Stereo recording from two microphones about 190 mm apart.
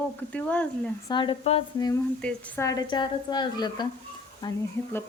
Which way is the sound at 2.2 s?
5° left (ahead or behind).